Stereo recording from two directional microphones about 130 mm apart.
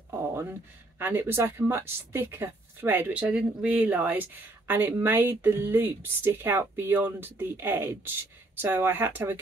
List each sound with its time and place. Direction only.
0.3 s speech: 20° right (ahead or behind)